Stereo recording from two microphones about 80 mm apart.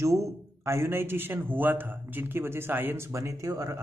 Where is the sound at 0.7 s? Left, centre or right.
Right.